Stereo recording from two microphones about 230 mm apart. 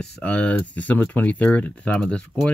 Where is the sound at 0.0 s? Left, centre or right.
Centre.